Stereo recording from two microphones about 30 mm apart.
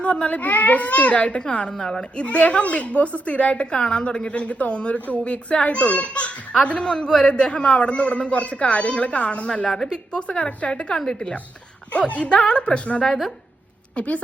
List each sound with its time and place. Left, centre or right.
0.0 s a woman's voice: left
0.5 s a child's voice: left
1.4 s a woman's voice: left
1.8 s a man's voice: left
2.1 s a woman's voice: left
3.5 s a woman's voice: left
6.8 s a man's voice: left
7.5 s a woman's voice: left
9.6 s a man's voice: left
10.2 s a woman's voice: left
10.9 s a man's voice: centre
11.9 s a woman's voice: left
12.3 s a woman's voice: left